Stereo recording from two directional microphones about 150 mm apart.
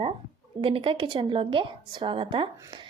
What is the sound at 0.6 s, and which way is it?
A woman's voice, 35° right (ahead or behind).